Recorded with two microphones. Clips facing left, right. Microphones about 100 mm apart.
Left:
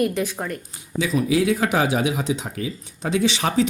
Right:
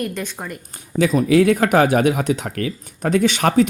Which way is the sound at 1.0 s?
55° right (ahead or behind).